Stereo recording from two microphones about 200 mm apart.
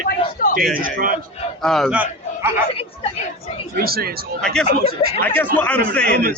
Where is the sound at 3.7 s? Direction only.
50° right (ahead or behind).